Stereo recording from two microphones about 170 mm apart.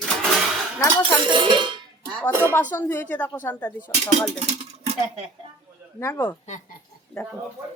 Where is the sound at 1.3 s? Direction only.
30° right (ahead or behind).